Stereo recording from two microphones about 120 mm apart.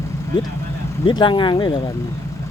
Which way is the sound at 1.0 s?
40° left (ahead or behind).